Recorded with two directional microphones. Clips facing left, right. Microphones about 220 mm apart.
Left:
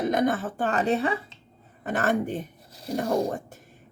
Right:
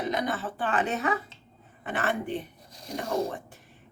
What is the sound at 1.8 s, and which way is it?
Speech, 40° left (ahead or behind).